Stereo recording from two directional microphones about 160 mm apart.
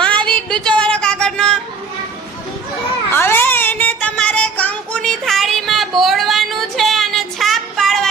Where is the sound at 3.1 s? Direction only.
15° left (ahead or behind).